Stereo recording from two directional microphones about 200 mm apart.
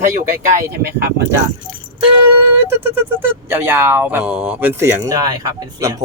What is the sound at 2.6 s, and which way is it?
Speech, 10° right (ahead or behind).